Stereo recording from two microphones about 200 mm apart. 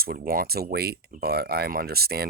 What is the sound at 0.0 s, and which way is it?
Speech, 50° right (ahead or behind).